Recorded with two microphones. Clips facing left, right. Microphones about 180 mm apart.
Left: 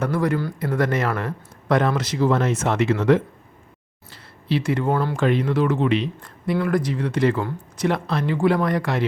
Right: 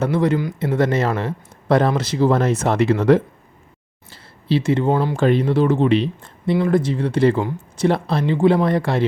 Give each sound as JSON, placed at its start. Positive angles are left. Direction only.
{"t": 0.0, "sound": "speech", "side_deg": -25}
{"t": 5.1, "sound": "speech", "side_deg": -30}